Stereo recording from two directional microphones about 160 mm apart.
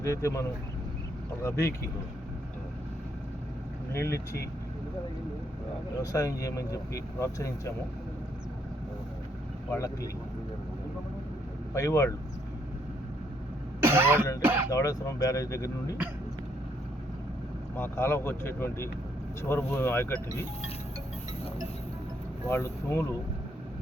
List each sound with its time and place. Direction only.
0.0 s speech: 20° left (ahead or behind)
3.9 s speech: 15° left (ahead or behind)
6.0 s speech: 20° left (ahead or behind)
9.7 s speech: 20° left (ahead or behind)
11.7 s speech: 20° left (ahead or behind)
13.8 s throat clearing: 15° right (ahead or behind)
14.7 s speech: 20° left (ahead or behind)
17.7 s speech: 15° left (ahead or behind)
22.4 s speech: 15° left (ahead or behind)